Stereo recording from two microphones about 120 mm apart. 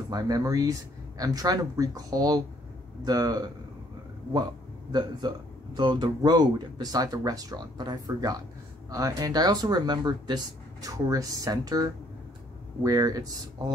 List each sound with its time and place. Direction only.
0.1 s speech: 30° right (ahead or behind)
5.8 s speech: 40° right (ahead or behind)